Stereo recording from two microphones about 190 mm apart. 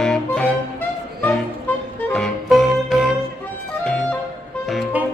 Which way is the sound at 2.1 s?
Centre (ahead or behind).